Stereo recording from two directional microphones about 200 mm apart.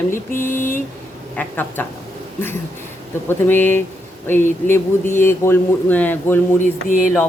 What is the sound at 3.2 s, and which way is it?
A man's voice, 10° left (ahead or behind).